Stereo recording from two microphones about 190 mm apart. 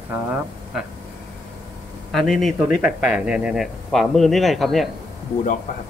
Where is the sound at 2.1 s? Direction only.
Centre (ahead or behind).